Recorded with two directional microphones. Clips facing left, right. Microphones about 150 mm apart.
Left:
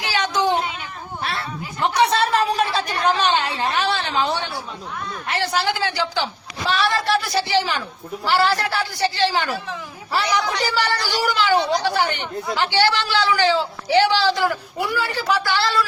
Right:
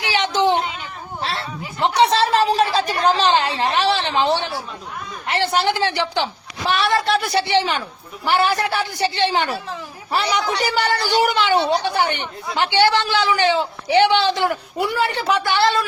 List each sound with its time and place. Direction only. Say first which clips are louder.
0.1 s a sound: right 2 dB; 25° right (ahead or behind)
5.3 s a man's voice: right 3 dB; 25° right (ahead or behind)
10.6 s speech: right 2 dB; 20° right (ahead or behind)
11.4 s speech: right 1 dB; 30° right (ahead or behind)
11.9 s speech: right 1 dB; 15° right (ahead or behind)